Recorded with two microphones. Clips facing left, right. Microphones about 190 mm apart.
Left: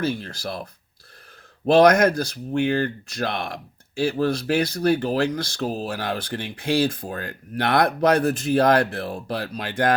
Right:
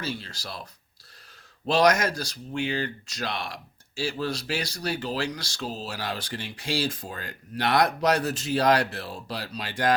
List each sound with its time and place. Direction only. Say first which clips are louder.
0.0 s speech: left 8 dB; 55° left (ahead or behind)